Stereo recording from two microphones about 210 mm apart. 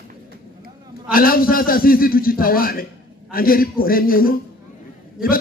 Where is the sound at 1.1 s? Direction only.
45° left (ahead or behind).